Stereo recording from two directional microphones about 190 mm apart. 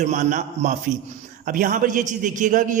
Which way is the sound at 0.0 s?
40° right (ahead or behind).